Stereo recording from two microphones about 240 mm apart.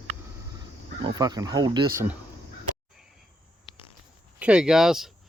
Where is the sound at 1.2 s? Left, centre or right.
Centre.